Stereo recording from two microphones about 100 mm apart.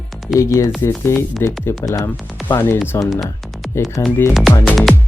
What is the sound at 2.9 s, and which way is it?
Speech, 35° left (ahead or behind).